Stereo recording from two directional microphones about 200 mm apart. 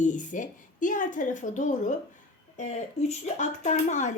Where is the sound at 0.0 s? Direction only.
40° left (ahead or behind).